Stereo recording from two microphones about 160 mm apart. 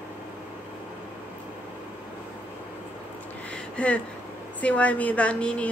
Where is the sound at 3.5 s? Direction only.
10° left (ahead or behind).